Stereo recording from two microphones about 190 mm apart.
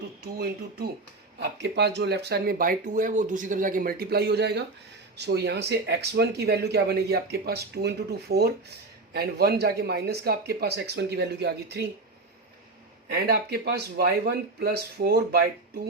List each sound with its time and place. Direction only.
0.2 s speech: 55° right (ahead or behind)
13.1 s speech: 55° right (ahead or behind)